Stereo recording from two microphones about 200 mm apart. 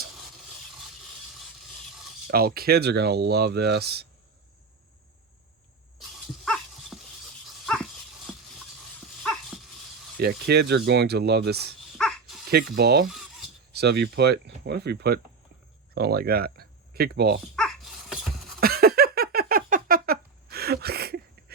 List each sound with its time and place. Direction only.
2.2 s speech: 50° right (ahead or behind)
6.0 s dog: centre (ahead or behind)
10.2 s speech: 55° right (ahead or behind)
11.9 s dog: centre (ahead or behind)
12.5 s speech: 50° right (ahead or behind)
13.1 s filing: centre (ahead or behind)
13.7 s speech: 55° right (ahead or behind)
17.5 s dog: centre (ahead or behind)
18.6 s a sound: 50° right (ahead or behind)